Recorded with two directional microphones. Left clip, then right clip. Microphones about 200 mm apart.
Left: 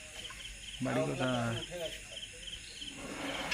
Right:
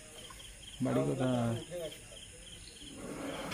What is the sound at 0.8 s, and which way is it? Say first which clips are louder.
Speech: right 1 dB; 30° right (ahead or behind).